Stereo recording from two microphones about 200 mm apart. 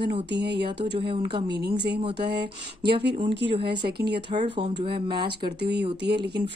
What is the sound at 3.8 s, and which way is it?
Speech, 55° right (ahead or behind).